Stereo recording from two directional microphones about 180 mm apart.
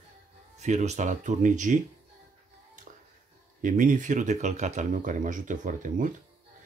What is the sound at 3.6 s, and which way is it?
Speech, 45° right (ahead or behind).